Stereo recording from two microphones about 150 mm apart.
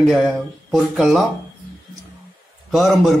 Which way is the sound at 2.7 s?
Centre (ahead or behind).